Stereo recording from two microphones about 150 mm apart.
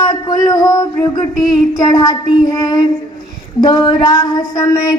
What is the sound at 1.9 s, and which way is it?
Speech, 25° left (ahead or behind).